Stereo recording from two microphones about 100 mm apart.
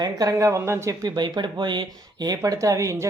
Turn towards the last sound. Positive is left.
turn(degrees=-30)  # may be behind; listen again after turning